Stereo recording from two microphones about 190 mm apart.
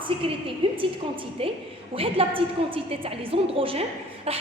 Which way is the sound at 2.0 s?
30° right (ahead or behind).